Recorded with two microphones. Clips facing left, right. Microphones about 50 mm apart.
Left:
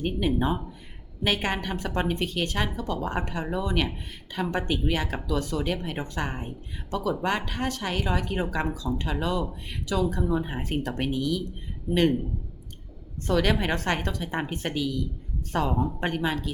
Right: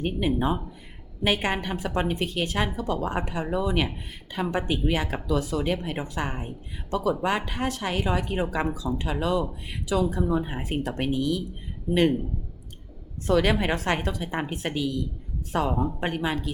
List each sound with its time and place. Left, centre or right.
0.0 s a woman's voice: centre
13.2 s a woman's voice: centre